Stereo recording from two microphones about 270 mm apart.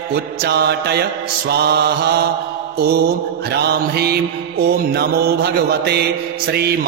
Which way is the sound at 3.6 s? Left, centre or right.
Right.